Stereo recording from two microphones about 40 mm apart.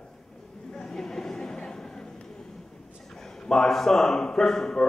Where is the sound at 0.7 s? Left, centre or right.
Centre.